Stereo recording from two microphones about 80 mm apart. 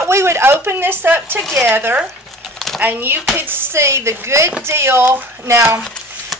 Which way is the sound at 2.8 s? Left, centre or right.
Right.